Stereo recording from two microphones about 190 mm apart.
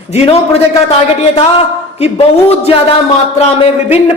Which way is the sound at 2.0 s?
30° left (ahead or behind).